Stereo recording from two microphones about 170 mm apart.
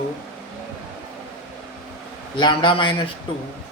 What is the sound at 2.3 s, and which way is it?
Speech, 30° left (ahead or behind).